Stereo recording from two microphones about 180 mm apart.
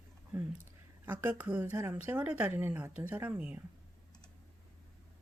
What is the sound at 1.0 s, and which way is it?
A woman's voice, 10° right (ahead or behind).